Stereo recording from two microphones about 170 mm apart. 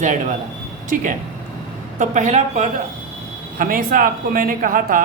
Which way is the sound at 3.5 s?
55° right (ahead or behind).